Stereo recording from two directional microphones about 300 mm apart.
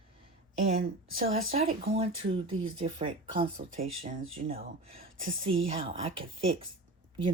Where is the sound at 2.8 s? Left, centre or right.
Centre.